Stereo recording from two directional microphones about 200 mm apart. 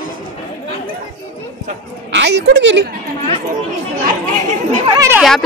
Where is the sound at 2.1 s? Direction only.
60° right (ahead or behind).